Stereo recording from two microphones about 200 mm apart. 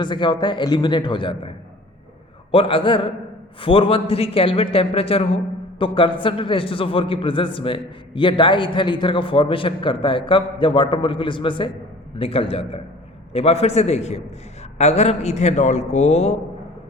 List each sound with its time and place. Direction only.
0.0 s a man's voice: 25° left (ahead or behind)